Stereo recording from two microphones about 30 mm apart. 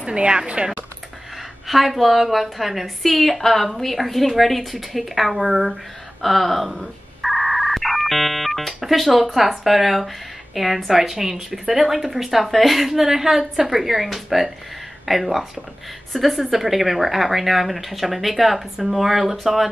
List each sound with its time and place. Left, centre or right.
0.0 s speech: right
1.7 s a woman's voice: centre
12.9 s a woman's voice: centre